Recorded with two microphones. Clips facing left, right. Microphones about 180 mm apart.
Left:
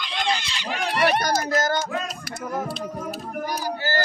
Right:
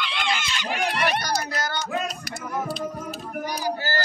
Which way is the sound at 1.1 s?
45° left (ahead or behind).